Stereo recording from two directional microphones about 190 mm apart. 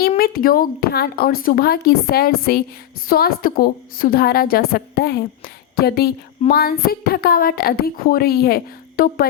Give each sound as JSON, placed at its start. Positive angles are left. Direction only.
{"t": 0.2, "sound": "a woman's voice", "side_deg": 50}